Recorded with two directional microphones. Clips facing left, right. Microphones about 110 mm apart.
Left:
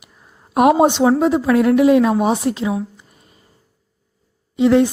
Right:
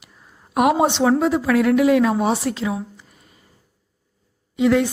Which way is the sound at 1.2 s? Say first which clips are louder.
Left 3 dB; 25° left (ahead or behind).